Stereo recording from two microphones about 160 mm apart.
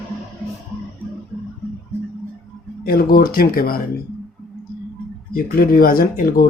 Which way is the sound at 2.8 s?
65° left (ahead or behind).